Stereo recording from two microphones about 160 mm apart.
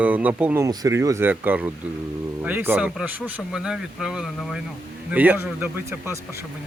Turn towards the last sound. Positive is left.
turn(degrees=-15)  # may be behind; listen again after turning